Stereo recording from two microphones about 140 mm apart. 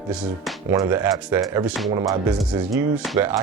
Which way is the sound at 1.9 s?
25° right (ahead or behind).